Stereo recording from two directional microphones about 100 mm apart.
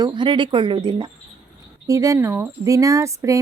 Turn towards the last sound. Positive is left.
turn(degrees=-30)  # may be behind; listen again after turning